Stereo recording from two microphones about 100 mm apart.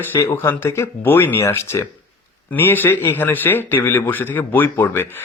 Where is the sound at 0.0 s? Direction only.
25° left (ahead or behind).